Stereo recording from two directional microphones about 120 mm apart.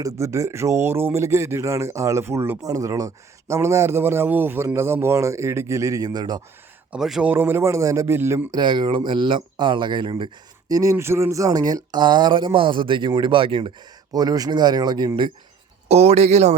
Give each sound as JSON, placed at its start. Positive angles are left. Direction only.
{"t": 0.0, "sound": "speech", "side_deg": -25}
{"t": 6.9, "sound": "speech", "side_deg": -5}
{"t": 7.3, "sound": "speech", "side_deg": -20}
{"t": 8.5, "sound": "speech", "side_deg": -40}
{"t": 10.7, "sound": "speech", "side_deg": -30}
{"t": 14.1, "sound": "speech", "side_deg": -30}
{"t": 15.9, "sound": "speech", "side_deg": -60}